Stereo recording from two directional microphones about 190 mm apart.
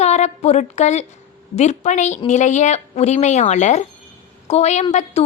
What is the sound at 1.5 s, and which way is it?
A woman's voice, 40° left (ahead or behind).